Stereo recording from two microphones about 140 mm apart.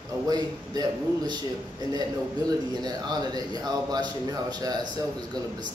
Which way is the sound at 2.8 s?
30° right (ahead or behind).